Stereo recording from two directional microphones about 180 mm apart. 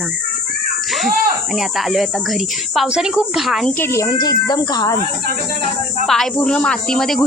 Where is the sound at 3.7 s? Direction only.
15° left (ahead or behind).